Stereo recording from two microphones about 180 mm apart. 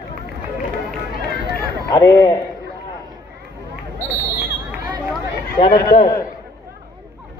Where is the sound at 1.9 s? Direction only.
20° left (ahead or behind).